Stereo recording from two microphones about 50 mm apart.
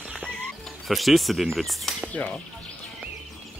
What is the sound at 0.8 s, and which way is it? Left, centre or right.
Speech, centre.